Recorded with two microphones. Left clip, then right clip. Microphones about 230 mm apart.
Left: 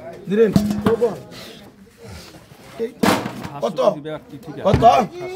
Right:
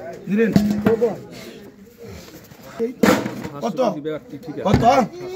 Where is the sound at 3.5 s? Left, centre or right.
Left.